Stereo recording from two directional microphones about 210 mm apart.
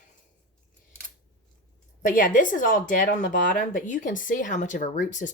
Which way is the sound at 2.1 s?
40° left (ahead or behind).